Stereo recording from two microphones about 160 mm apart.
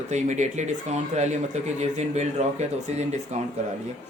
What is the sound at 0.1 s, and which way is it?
Speech, 50° right (ahead or behind).